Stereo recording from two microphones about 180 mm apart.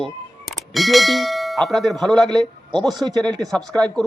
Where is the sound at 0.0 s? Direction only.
Centre (ahead or behind).